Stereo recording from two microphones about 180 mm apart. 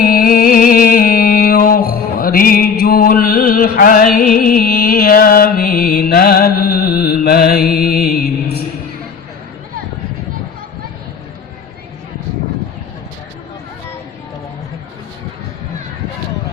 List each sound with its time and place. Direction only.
0.0 s music: 55° left (ahead or behind)